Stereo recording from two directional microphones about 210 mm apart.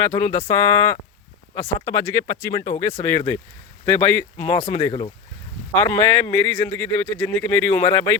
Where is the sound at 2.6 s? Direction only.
15° left (ahead or behind).